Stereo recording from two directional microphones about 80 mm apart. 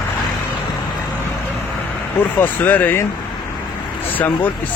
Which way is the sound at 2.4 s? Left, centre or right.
Left.